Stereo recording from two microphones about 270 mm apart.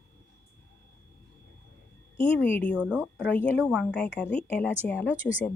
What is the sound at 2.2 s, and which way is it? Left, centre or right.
Speech, centre.